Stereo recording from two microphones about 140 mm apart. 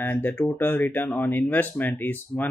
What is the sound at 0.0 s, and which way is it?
Speech, 15° left (ahead or behind).